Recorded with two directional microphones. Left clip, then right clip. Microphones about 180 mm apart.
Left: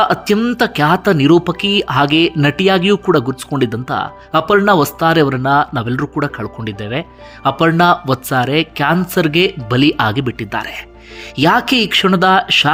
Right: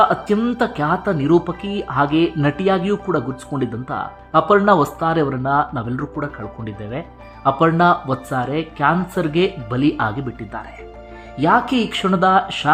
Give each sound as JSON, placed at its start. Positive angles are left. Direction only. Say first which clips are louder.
{"t": 0.0, "sound": "speech", "louder": "left 2 dB", "side_deg": 15}